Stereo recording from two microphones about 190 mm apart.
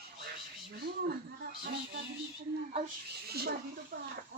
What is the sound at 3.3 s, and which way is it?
Speech, 55° right (ahead or behind).